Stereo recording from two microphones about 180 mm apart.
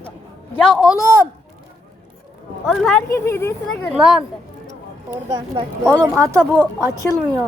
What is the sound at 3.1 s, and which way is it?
Speech, 15° left (ahead or behind).